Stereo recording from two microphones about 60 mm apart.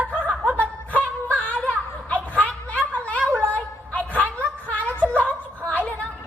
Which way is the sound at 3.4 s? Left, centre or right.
Left.